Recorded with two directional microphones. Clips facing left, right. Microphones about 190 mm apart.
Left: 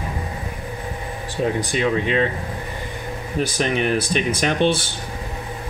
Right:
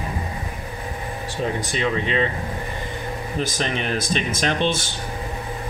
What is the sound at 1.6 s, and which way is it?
Speech, 10° left (ahead or behind).